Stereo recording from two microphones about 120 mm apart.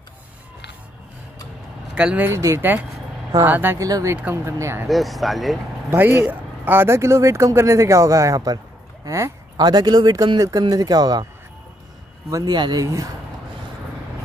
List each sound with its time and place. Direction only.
2.0 s speech: 10° right (ahead or behind)
4.8 s speech: centre (ahead or behind)
5.9 s speech: 15° right (ahead or behind); by 11.2 s 35° right (ahead or behind)
12.3 s speech: 25° right (ahead or behind)